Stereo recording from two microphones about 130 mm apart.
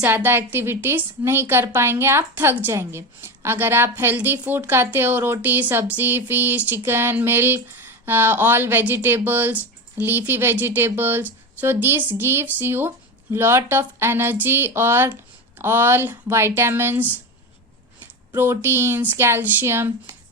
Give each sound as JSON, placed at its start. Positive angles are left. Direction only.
{"t": 0.0, "sound": "speech", "side_deg": -15}
{"t": 18.6, "sound": "speech", "side_deg": -20}